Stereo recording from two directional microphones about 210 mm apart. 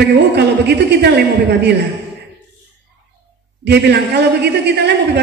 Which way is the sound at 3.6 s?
50° right (ahead or behind).